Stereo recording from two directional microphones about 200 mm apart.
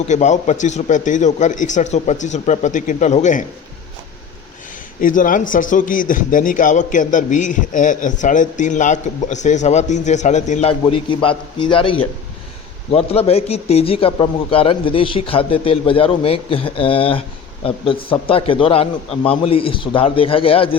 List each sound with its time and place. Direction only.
0.1 s a man's voice: 35° left (ahead or behind)
4.9 s a man's voice: 40° left (ahead or behind)